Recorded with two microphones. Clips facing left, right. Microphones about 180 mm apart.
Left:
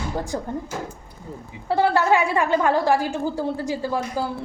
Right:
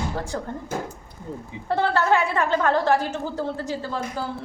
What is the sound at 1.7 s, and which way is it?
A woman's voice, 10° left (ahead or behind).